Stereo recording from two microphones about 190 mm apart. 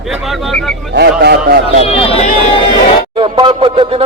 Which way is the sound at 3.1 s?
25° right (ahead or behind).